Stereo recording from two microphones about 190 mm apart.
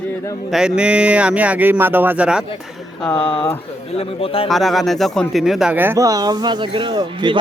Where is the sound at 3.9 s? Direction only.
30° left (ahead or behind).